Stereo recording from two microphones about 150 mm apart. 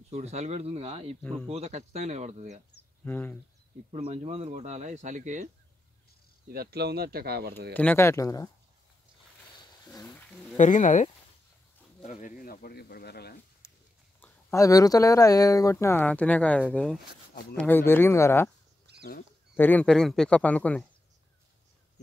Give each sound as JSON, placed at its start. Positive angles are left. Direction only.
{"t": 0.1, "sound": "speech", "side_deg": -50}
{"t": 3.1, "sound": "speech", "side_deg": 15}
{"t": 3.9, "sound": "speech", "side_deg": -45}
{"t": 6.5, "sound": "speech", "side_deg": -90}
{"t": 7.7, "sound": "speech", "side_deg": 10}
{"t": 10.6, "sound": "speech", "side_deg": 55}
{"t": 14.2, "sound": "speech", "side_deg": 20}
{"t": 17.3, "sound": "a sound", "side_deg": 85}
{"t": 17.6, "sound": "speech", "side_deg": 15}
{"t": 18.9, "sound": "rodents", "side_deg": -90}
{"t": 19.5, "sound": "speech", "side_deg": 10}